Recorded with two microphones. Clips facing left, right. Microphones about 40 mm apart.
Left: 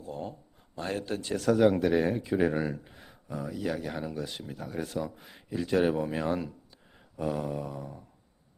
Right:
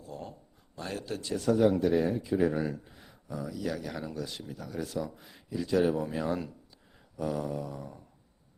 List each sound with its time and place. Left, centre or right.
0.0 s a sound: left
0.8 s speech: left
1.8 s speech: left
2.6 s speech: left
3.5 s speech: left
4.4 s speech: left
6.0 s speech: left
6.9 s a sound: centre
7.8 s a sound: centre